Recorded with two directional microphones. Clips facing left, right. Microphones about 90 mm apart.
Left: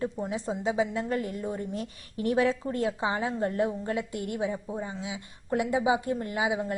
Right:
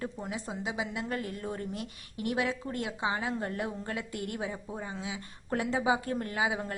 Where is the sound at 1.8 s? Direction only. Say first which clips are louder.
Left 4 dB; 35° left (ahead or behind).